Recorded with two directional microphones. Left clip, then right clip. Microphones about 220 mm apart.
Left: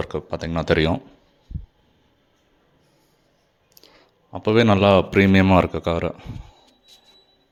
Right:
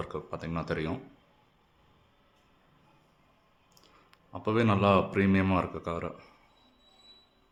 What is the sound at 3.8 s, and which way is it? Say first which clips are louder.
Speech: left 8 dB; 25° left (ahead or behind).